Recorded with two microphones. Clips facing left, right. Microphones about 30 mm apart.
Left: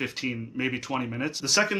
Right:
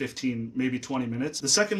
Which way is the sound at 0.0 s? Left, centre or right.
Left.